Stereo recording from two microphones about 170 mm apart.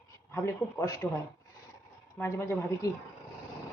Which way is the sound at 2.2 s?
15° left (ahead or behind).